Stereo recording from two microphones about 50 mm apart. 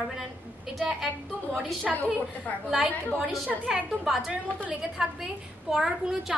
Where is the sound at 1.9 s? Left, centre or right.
Centre.